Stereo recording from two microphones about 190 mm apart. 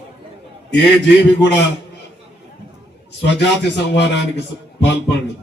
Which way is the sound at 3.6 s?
65° left (ahead or behind).